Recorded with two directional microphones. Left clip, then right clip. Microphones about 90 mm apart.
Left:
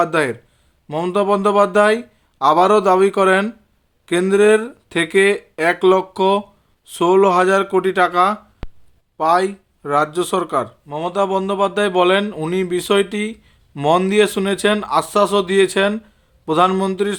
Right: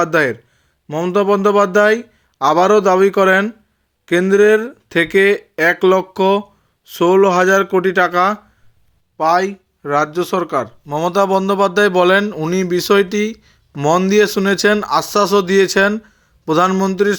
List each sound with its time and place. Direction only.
0.0 s speech: 25° right (ahead or behind)
0.9 s a man's voice: 10° right (ahead or behind)
1.1 s speech: 20° right (ahead or behind)
10.8 s speech: 65° right (ahead or behind); by 12.2 s 45° right (ahead or behind)
12.3 s speech: 25° right (ahead or behind)
12.5 s speech: 40° right (ahead or behind)
13.7 s speech: 25° right (ahead or behind); by 15.9 s 45° right (ahead or behind)
16.0 s a sound: 35° right (ahead or behind)
16.7 s speech: 20° right (ahead or behind)